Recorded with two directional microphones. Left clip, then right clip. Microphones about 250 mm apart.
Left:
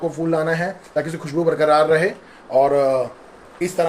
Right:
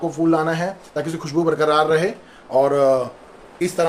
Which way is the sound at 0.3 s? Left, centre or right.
Centre.